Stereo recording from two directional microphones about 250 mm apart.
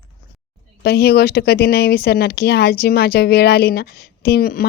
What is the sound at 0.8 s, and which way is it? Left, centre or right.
Speech, left.